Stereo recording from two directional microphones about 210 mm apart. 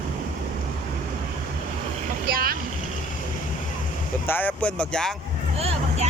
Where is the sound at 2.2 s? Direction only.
45° right (ahead or behind).